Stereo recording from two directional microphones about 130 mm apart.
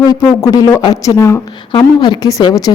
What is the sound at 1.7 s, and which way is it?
Speech, 35° left (ahead or behind).